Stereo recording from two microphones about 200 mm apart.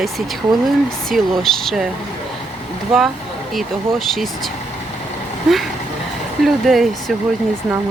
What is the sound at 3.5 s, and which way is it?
Speech, centre (ahead or behind).